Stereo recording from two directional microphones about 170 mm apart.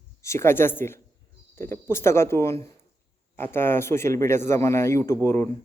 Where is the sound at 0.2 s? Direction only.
15° left (ahead or behind).